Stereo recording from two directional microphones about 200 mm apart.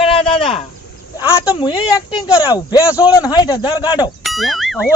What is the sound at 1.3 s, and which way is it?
A man's voice, 20° left (ahead or behind).